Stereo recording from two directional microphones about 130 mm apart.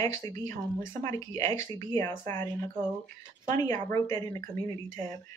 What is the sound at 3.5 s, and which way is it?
Speech, 25° left (ahead or behind).